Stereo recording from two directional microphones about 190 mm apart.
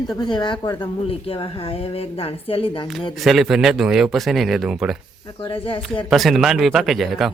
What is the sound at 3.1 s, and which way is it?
Speech, centre (ahead or behind).